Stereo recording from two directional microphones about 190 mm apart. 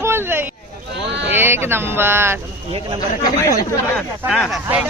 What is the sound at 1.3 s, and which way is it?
Speech, 10° right (ahead or behind).